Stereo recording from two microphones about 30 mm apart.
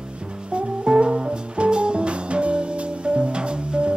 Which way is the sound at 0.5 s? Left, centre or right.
Right.